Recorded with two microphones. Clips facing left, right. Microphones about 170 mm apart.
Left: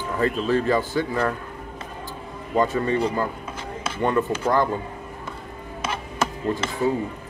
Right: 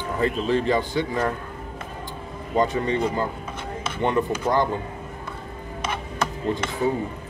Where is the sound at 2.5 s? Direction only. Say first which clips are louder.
Left 1 dB; 20° right (ahead or behind).